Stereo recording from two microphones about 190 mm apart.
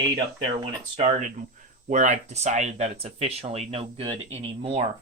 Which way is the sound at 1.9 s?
40° right (ahead or behind).